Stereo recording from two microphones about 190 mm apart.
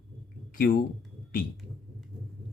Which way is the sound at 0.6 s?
50° left (ahead or behind).